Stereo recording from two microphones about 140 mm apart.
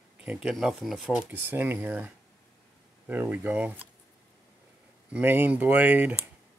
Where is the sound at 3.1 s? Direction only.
10° right (ahead or behind).